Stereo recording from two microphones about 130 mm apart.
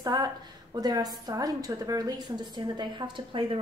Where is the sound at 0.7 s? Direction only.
30° right (ahead or behind).